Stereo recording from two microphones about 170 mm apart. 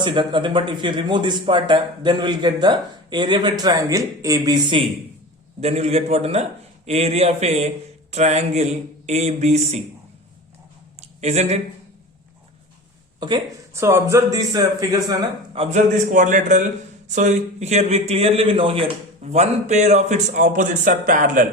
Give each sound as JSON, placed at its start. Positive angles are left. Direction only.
{"t": 0.0, "sound": "speech", "side_deg": -30}
{"t": 5.5, "sound": "a man's voice", "side_deg": -40}
{"t": 11.2, "sound": "a man's voice", "side_deg": -40}
{"t": 13.1, "sound": "speech", "side_deg": -25}
{"t": 15.5, "sound": "a man's voice", "side_deg": -35}
{"t": 16.1, "sound": "a man's voice", "side_deg": -45}